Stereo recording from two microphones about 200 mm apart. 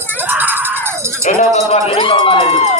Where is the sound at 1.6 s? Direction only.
30° left (ahead or behind).